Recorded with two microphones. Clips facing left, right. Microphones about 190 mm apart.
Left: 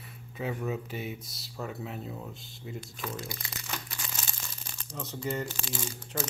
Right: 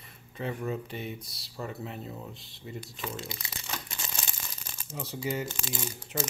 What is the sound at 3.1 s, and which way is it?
Speech, 25° right (ahead or behind).